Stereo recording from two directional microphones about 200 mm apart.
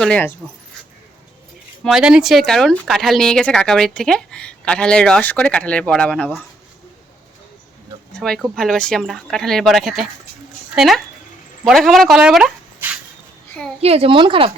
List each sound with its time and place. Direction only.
0.0 s speech: 5° left (ahead or behind)
1.8 s speech: centre (ahead or behind)
8.1 s speech: centre (ahead or behind)
13.8 s a woman's voice: 30° right (ahead or behind)